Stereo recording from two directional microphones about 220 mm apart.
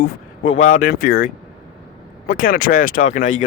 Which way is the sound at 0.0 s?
35° left (ahead or behind).